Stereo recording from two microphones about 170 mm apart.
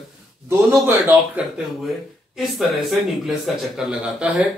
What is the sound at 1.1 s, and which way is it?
Speech, 5° right (ahead or behind).